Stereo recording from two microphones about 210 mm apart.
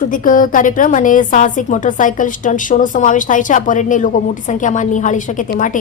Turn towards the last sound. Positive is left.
turn(degrees=40)  # may be behind; listen again after turning